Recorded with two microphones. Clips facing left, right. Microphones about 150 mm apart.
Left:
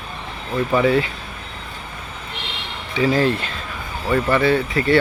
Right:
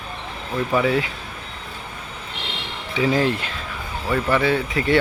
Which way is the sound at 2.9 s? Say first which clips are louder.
Left 2 dB; 15° right (ahead or behind).